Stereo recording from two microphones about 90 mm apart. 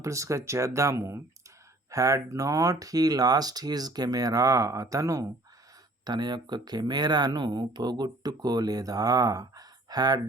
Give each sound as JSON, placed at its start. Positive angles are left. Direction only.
{"t": 0.0, "sound": "speech", "side_deg": -35}
{"t": 6.1, "sound": "speech", "side_deg": -50}